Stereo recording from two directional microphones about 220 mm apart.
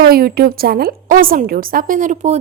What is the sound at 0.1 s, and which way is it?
A woman's voice, 45° right (ahead or behind).